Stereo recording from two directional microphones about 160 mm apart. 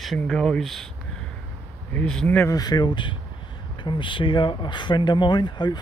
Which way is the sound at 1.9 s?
5° left (ahead or behind).